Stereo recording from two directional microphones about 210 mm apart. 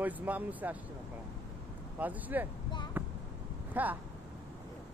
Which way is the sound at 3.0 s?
10° right (ahead or behind).